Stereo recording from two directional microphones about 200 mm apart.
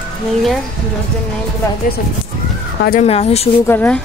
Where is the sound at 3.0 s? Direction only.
30° left (ahead or behind).